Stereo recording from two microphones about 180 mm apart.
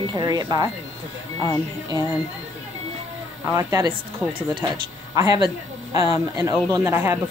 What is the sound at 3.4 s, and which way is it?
Speech, 20° right (ahead or behind).